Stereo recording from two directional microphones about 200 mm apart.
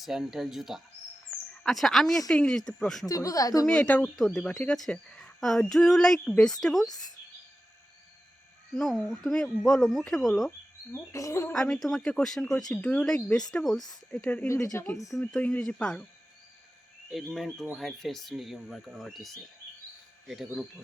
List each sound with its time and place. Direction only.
0.0 s speech: centre (ahead or behind)
3.1 s speech: 15° left (ahead or behind)
3.7 s speech: 5° left (ahead or behind)
8.7 s speech: centre (ahead or behind)
11.1 s speech: 15° left (ahead or behind)
11.5 s speech: 5° left (ahead or behind)
15.1 s speech: 5° left (ahead or behind)
17.1 s speech: centre (ahead or behind)